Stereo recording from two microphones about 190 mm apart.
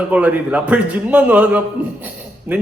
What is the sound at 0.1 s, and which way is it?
A man's voice, 10° right (ahead or behind).